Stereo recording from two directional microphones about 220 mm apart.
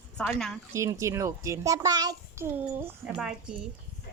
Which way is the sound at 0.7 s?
15° right (ahead or behind).